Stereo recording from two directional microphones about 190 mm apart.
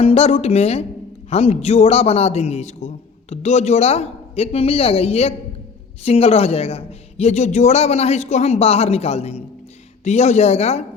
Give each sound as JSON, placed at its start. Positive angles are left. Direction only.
{"t": 0.0, "sound": "a man's voice", "side_deg": 30}